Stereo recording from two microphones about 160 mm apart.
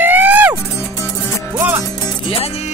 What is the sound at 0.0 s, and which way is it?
Music, 10° right (ahead or behind).